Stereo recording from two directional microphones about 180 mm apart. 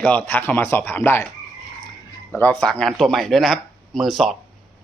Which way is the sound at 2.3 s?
10° left (ahead or behind).